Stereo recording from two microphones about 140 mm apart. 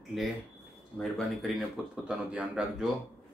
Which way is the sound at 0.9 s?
Centre (ahead or behind).